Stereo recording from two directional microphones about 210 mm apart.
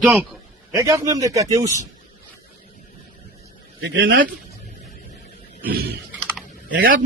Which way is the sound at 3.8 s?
60° right (ahead or behind).